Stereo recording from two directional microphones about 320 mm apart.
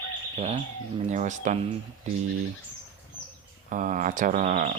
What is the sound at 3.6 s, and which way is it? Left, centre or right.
Speech, right.